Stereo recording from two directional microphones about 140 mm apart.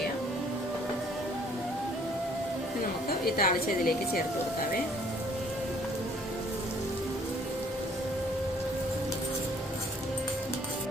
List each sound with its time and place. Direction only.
3.2 s a woman's voice: 90° left